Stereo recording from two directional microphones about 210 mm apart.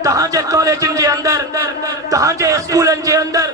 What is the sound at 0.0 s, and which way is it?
A man's voice, 15° right (ahead or behind).